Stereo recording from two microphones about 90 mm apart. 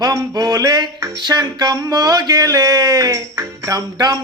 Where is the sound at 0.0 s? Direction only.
45° right (ahead or behind).